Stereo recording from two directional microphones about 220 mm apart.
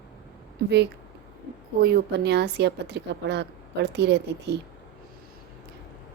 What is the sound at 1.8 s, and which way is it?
A woman's voice, 45° right (ahead or behind).